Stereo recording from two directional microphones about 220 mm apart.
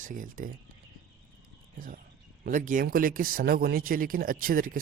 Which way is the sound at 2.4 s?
35° right (ahead or behind).